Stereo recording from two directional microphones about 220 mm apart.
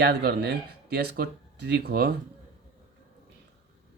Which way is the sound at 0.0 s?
50° right (ahead or behind).